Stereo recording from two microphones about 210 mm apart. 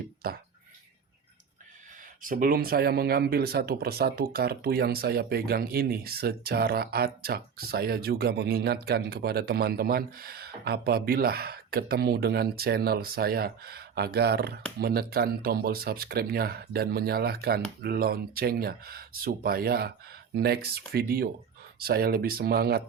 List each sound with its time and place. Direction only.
0.2 s speech: 45° right (ahead or behind)
2.2 s speech: 40° right (ahead or behind)